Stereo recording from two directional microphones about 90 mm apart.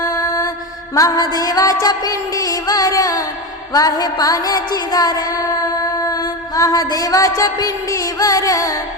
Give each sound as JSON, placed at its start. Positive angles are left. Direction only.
{"t": 0.9, "sound": "music", "side_deg": 45}